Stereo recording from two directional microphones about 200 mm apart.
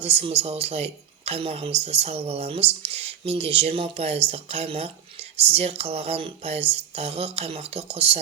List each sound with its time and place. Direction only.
0.0 s speech: 30° right (ahead or behind)